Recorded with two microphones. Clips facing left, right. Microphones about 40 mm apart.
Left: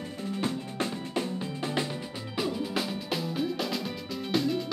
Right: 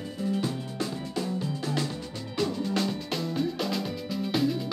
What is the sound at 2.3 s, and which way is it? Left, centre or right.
Music, centre.